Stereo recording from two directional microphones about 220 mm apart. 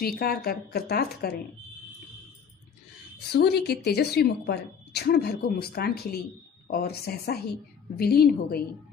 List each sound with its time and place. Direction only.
0.2 s a woman's voice: 45° left (ahead or behind)
3.3 s a woman's voice: 50° left (ahead or behind)